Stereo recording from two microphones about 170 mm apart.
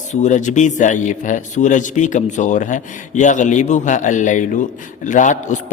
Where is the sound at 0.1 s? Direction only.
45° left (ahead or behind).